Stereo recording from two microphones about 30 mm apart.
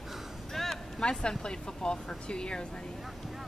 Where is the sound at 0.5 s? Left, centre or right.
Centre.